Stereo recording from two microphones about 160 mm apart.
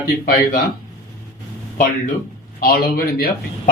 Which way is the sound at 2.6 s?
65° left (ahead or behind).